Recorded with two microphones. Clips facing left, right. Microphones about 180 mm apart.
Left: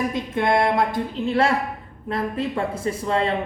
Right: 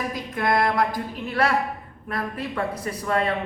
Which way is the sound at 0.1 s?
25° left (ahead or behind).